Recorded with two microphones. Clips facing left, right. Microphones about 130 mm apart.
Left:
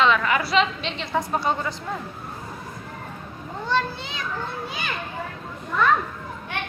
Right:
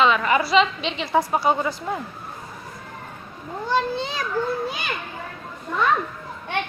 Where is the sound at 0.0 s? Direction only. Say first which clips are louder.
Right 2 dB; 5° right (ahead or behind).